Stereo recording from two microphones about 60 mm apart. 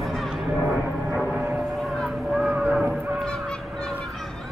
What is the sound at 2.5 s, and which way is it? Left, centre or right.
Music, right.